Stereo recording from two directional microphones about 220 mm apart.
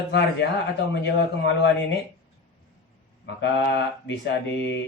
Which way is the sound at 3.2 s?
50° left (ahead or behind).